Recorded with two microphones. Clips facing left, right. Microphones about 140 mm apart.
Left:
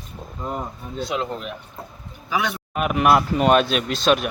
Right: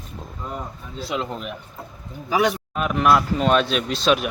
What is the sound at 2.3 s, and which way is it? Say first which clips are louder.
Speech: right 4 dB; 35° right (ahead or behind).